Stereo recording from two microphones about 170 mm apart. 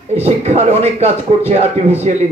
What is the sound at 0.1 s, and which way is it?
Speech, 40° right (ahead or behind).